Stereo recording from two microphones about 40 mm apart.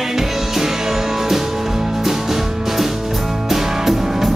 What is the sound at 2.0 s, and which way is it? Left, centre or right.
Music, centre.